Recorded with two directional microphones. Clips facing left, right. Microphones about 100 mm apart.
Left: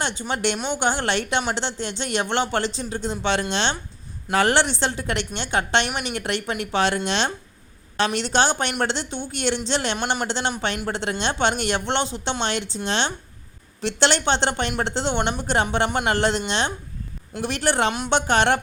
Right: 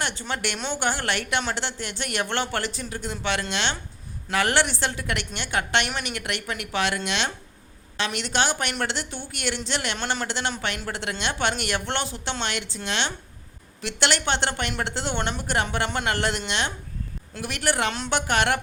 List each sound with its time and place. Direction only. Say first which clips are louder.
0.0 s speech: left 4 dB; 20° left (ahead or behind)
10.0 s a man's voice: left 3 dB; 15° left (ahead or behind)
10.2 s speech: left 3 dB; 25° left (ahead or behind)